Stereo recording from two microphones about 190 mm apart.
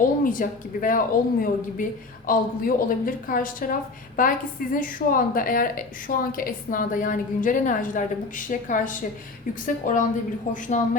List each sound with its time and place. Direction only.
0.0 s a woman's voice: 45° left (ahead or behind)